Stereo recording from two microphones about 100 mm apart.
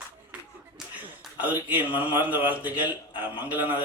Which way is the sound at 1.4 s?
20° right (ahead or behind).